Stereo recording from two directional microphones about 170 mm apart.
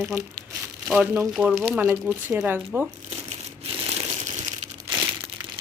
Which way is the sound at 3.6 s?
35° right (ahead or behind).